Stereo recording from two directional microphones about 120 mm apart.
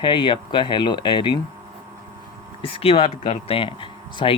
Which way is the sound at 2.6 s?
50° left (ahead or behind).